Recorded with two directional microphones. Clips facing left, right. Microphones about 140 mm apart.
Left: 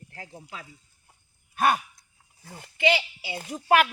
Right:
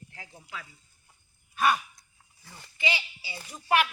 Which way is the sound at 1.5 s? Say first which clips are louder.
Left 2 dB; 50° left (ahead or behind).